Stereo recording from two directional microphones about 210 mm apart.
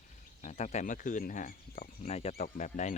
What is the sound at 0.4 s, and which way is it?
Speech, 35° left (ahead or behind).